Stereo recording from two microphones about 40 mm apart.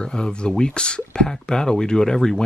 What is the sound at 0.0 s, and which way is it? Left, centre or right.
Speech, left.